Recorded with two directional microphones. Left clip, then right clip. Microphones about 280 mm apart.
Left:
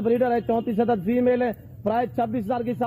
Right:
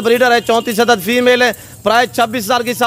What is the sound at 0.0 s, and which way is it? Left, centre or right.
A man's voice, centre.